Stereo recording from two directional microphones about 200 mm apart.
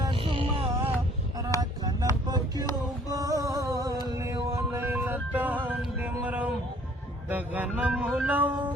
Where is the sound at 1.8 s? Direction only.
20° right (ahead or behind).